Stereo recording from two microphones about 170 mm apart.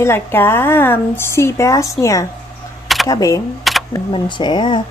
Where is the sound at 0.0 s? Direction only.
15° left (ahead or behind).